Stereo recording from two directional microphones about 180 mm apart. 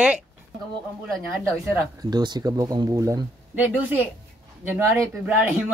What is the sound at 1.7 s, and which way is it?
Speech, 20° right (ahead or behind).